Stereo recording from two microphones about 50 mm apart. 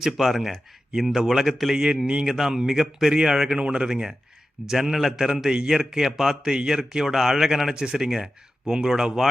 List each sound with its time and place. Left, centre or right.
0.0 s a man's voice: centre
2.2 s a man's voice: centre
3.6 s speech: right
4.7 s a man's voice: centre